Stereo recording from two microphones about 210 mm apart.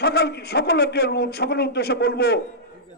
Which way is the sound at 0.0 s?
50° left (ahead or behind).